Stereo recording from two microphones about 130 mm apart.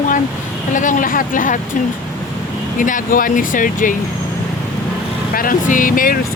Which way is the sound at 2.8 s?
90° left.